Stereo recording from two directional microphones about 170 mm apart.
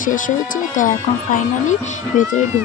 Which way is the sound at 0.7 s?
50° left (ahead or behind).